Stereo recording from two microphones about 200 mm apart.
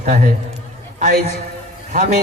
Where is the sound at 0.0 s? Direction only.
40° right (ahead or behind).